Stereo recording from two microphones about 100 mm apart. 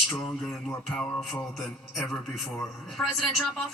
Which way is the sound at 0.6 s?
20° left (ahead or behind).